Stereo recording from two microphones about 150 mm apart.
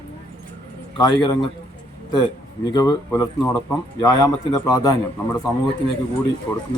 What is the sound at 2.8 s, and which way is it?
A woman's voice, 25° left (ahead or behind).